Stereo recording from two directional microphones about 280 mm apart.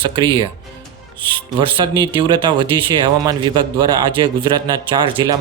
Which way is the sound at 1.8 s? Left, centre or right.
Centre.